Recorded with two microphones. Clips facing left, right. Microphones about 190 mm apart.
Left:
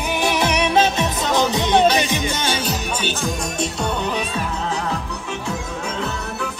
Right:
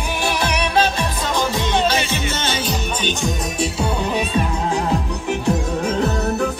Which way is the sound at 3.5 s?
5° right (ahead or behind).